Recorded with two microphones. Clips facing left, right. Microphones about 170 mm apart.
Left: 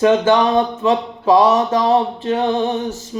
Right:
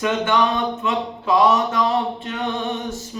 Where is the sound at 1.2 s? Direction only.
40° left (ahead or behind).